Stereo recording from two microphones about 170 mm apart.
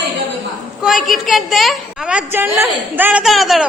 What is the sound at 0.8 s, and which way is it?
A woman's voice, centre (ahead or behind).